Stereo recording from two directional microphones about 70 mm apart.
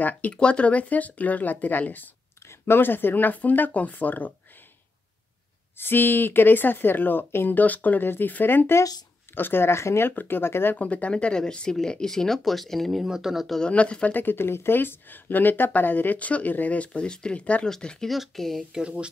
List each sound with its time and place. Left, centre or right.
0.0 s speech: centre
5.8 s speech: left
10.8 s speech: centre
13.0 s speech: centre
13.6 s speech: centre
14.1 s speech: left
17.6 s speech: centre
18.8 s speech: centre